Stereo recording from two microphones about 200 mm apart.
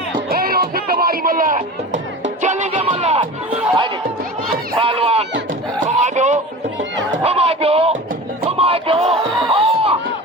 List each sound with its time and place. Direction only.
0.3 s music: 50° right (ahead or behind); by 3.2 s 30° right (ahead or behind)
4.8 s speech: 30° right (ahead or behind)
5.8 s a sound: 35° right (ahead or behind)
8.4 s music: 30° right (ahead or behind)
9.5 s crowd: 30° right (ahead or behind)